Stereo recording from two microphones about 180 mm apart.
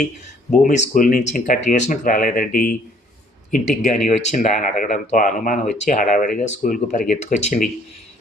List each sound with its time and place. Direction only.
0.9 s speech: 45° left (ahead or behind)